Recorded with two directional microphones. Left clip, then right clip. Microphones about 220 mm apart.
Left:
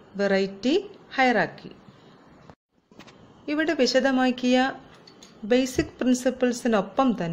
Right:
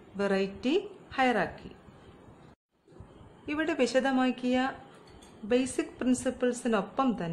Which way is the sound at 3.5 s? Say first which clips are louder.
Left 6 dB; 15° left (ahead or behind).